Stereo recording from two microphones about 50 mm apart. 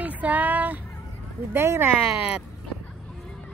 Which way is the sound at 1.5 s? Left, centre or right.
Right.